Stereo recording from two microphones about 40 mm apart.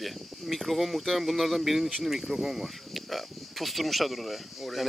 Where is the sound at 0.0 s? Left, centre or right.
Centre.